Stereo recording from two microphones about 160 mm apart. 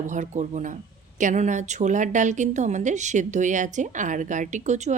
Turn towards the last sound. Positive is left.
turn(degrees=-45)  # may be behind; listen again after turning